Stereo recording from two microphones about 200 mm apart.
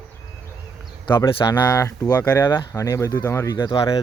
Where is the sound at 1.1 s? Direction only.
15° left (ahead or behind).